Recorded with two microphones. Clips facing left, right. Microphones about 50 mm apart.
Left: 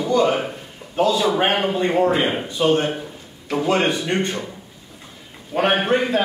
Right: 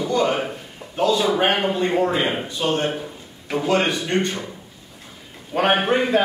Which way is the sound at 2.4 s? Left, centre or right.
Centre.